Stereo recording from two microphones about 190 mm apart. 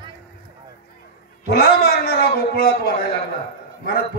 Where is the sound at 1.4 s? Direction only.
55° left (ahead or behind).